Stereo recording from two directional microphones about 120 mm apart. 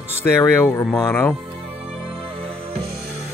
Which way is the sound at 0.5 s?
20° left (ahead or behind).